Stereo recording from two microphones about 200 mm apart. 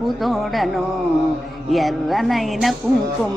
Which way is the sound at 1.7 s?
Centre (ahead or behind).